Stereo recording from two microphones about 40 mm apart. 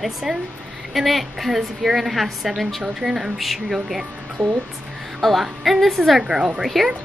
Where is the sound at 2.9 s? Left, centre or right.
Centre.